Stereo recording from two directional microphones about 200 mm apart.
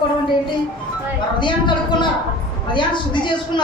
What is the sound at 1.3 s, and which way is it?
A man's voice, 25° left (ahead or behind).